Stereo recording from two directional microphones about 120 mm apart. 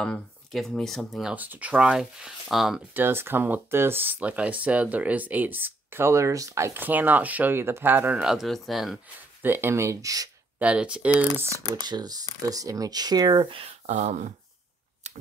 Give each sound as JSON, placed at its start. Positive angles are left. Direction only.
{"t": 0.0, "sound": "speech", "side_deg": 5}
{"t": 1.3, "sound": "speech", "side_deg": -15}
{"t": 2.9, "sound": "speech", "side_deg": -20}
{"t": 9.4, "sound": "speech", "side_deg": -15}
{"t": 10.6, "sound": "speech", "side_deg": -10}
{"t": 11.7, "sound": "speech", "side_deg": -35}
{"t": 13.5, "sound": "speech", "side_deg": -55}